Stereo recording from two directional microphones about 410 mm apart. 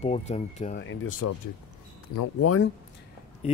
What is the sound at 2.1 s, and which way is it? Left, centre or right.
Speech, left.